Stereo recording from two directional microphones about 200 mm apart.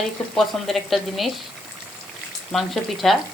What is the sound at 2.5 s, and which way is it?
Speech, centre (ahead or behind).